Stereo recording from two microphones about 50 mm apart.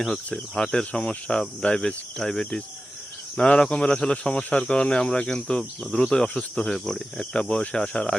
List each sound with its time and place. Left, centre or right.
0.3 s cricket: centre
3.3 s speech: centre
6.3 s cricket: centre